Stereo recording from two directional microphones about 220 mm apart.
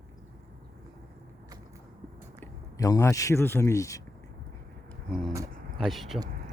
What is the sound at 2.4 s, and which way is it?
Speech, 15° left (ahead or behind).